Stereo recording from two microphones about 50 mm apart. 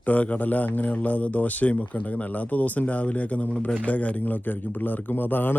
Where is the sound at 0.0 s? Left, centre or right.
Left.